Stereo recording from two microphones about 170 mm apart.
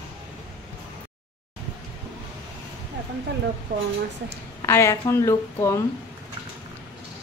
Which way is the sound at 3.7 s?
75° right (ahead or behind).